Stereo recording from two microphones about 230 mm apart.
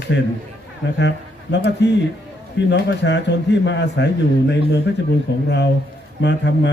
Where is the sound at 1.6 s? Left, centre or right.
Left.